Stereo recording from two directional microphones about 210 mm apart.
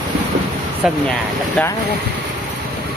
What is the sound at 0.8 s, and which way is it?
Speech, 5° right (ahead or behind).